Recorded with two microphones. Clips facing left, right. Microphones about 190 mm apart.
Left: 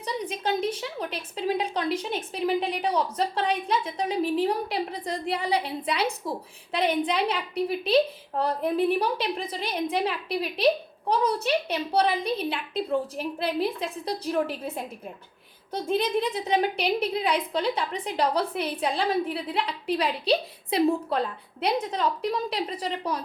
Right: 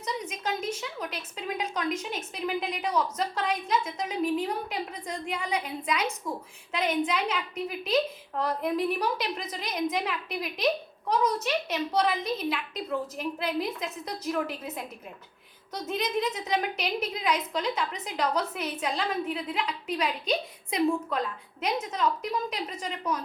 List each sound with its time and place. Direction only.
0.0 s a woman's voice: 30° left (ahead or behind)